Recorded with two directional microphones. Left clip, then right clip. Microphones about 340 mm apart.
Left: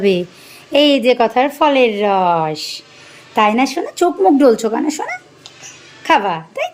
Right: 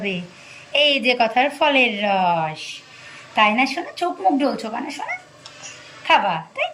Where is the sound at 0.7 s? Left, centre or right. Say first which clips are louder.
Left 5 dB; centre.